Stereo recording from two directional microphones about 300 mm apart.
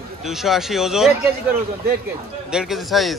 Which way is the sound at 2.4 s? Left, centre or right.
Centre.